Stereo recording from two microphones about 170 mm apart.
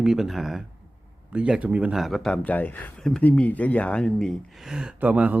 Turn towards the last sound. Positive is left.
turn(degrees=-10)  # may be behind; listen again after turning